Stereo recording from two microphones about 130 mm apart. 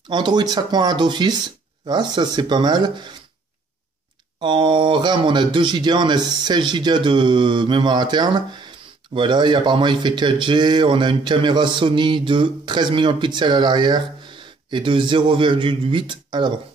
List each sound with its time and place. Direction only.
0.1 s speech: 35° right (ahead or behind)
4.4 s speech: 40° right (ahead or behind)